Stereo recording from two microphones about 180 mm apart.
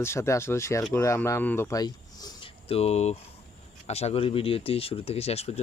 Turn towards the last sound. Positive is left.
turn(degrees=35)  # may be behind; listen again after turning